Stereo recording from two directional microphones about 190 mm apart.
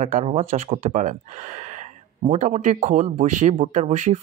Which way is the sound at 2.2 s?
35° right (ahead or behind).